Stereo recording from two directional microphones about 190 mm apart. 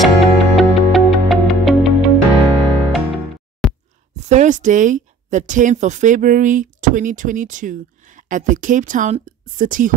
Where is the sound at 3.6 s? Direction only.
Centre (ahead or behind).